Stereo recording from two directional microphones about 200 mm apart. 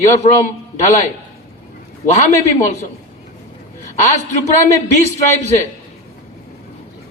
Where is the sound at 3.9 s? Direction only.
35° left (ahead or behind).